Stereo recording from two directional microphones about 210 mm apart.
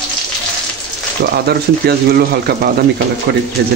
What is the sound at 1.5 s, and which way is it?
Speech, 50° right (ahead or behind).